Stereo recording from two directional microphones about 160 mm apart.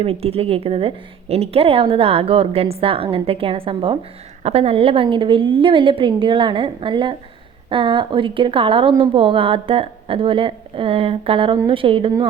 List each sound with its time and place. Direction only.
0.0 s speech: 35° right (ahead or behind)